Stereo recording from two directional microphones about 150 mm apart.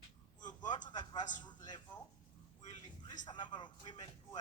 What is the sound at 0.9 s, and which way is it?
Speech, 25° left (ahead or behind).